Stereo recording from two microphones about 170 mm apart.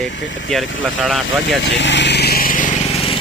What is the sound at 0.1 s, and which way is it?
Speech, 90° left.